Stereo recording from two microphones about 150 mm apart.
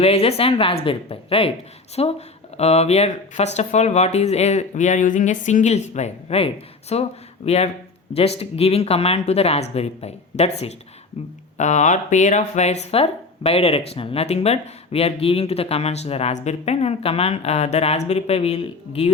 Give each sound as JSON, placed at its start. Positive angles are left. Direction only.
{"t": 0.0, "sound": "a woman's voice", "side_deg": 40}
{"t": 11.5, "sound": "speech", "side_deg": 50}